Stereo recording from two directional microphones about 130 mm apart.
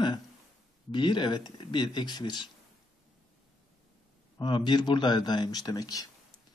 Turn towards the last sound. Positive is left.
turn(degrees=30)  # may be behind; listen again after turning